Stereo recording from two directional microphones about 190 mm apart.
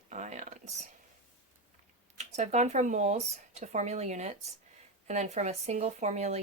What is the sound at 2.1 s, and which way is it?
Speech, 35° right (ahead or behind).